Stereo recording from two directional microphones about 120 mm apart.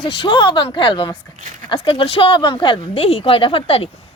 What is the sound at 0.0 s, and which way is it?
A woman's voice, 45° left (ahead or behind).